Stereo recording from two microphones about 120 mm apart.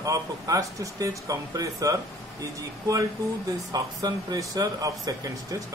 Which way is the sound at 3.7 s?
30° right (ahead or behind).